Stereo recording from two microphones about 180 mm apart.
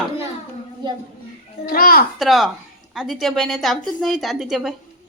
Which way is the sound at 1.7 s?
55° left (ahead or behind).